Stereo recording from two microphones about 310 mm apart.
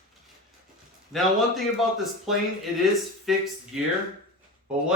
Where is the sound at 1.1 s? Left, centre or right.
Centre.